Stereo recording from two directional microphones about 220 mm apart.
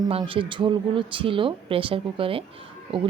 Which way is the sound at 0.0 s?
20° right (ahead or behind).